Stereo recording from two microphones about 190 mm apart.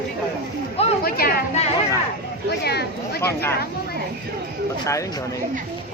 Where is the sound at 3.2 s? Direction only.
15° left (ahead or behind).